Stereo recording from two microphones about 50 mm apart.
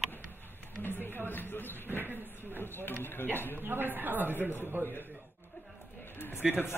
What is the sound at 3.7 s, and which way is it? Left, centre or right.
Speech, right.